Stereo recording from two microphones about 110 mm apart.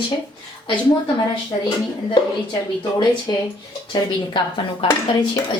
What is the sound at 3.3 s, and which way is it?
Speech, 30° left (ahead or behind).